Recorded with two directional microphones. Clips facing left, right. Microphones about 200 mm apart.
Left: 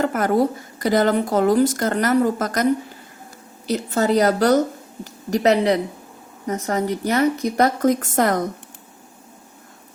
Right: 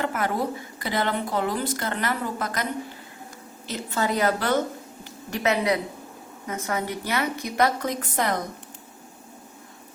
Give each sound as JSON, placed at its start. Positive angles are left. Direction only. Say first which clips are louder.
{"t": 0.0, "sound": "a woman's voice", "louder": "left 7 dB", "side_deg": 40}
{"t": 3.7, "sound": "a woman's voice", "louder": "left 7 dB", "side_deg": 40}